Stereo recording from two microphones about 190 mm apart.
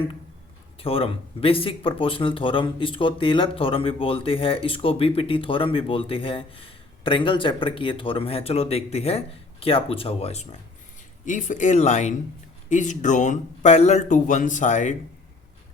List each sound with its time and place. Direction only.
0.8 s speech: 30° left (ahead or behind)